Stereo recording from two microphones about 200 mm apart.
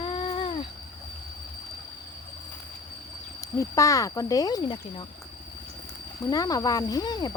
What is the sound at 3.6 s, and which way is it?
Speech, 15° left (ahead or behind).